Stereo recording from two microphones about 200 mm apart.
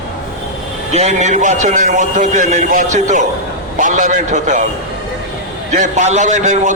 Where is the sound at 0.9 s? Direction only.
35° right (ahead or behind).